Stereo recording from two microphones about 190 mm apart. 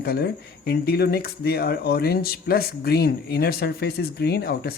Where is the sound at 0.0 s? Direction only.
55° left (ahead or behind).